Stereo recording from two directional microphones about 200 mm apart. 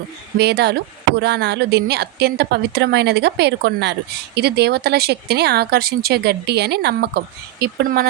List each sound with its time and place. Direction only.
0.3 s speech: 55° right (ahead or behind)